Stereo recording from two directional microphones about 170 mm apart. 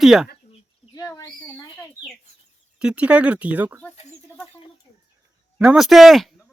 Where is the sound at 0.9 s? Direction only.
20° left (ahead or behind).